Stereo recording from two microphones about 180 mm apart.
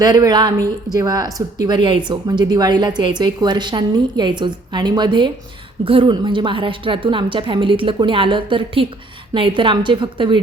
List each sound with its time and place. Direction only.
0.0 s speech: 20° right (ahead or behind)